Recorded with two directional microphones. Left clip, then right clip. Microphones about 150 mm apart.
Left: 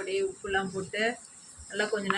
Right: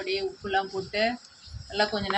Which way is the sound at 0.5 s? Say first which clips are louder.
Right 5 dB; 75° right (ahead or behind).